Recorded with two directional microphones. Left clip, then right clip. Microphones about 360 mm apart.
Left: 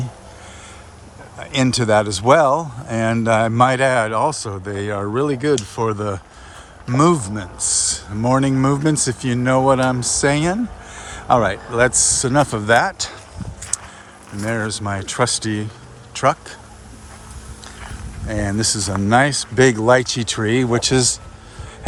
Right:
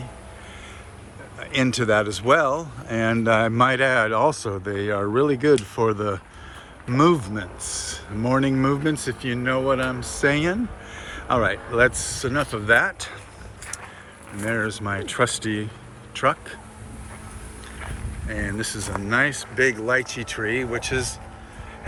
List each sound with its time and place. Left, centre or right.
1.5 s speech: centre
14.4 s speech: centre
18.3 s speech: centre